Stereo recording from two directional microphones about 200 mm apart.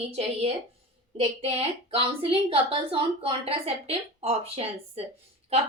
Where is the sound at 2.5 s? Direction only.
25° right (ahead or behind).